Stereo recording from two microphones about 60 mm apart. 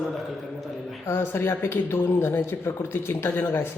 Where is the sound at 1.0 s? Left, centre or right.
Left.